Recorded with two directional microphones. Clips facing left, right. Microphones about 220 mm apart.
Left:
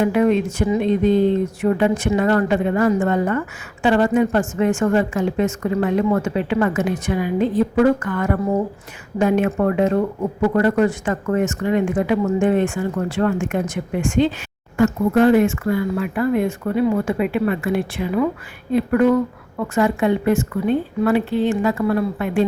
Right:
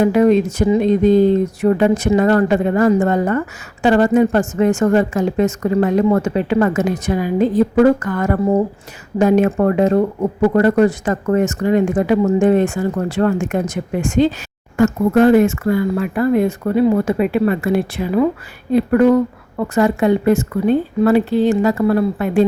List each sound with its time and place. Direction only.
0.0 s a woman's voice: 40° right (ahead or behind)